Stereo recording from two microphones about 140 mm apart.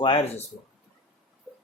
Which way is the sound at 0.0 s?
40° left (ahead or behind).